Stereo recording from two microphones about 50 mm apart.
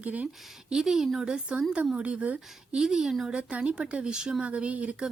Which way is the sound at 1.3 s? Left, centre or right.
Centre.